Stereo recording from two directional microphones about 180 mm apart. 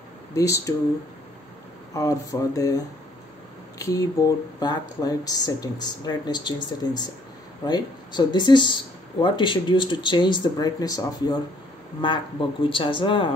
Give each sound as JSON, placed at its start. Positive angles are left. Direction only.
{"t": 0.3, "sound": "speech", "side_deg": 15}
{"t": 2.0, "sound": "speech", "side_deg": 20}